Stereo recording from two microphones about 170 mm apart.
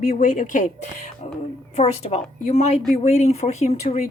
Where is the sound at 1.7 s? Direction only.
35° left (ahead or behind).